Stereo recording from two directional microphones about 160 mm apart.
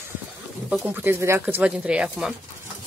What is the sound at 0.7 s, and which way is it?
Speech, 10° right (ahead or behind).